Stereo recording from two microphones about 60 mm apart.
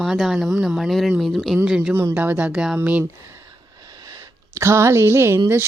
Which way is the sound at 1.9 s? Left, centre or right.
Right.